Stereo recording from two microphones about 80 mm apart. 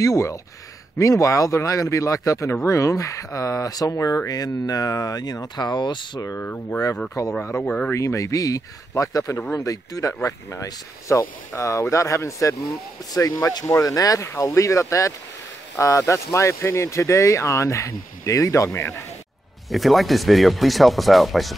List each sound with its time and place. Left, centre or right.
0.0 s speech: left
6.4 s speech: left
7.2 s speech: left
7.6 s speech: centre
7.9 s speech: left
18.7 s speech: left
19.7 s speech: centre